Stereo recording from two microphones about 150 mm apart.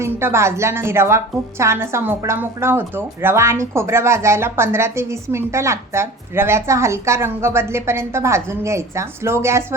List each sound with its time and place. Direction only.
0.0 s a woman's voice: 15° right (ahead or behind)